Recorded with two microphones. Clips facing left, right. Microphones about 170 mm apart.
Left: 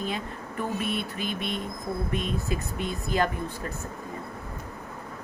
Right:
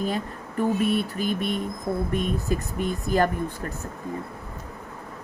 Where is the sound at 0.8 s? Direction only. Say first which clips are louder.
Right 6 dB; 40° right (ahead or behind).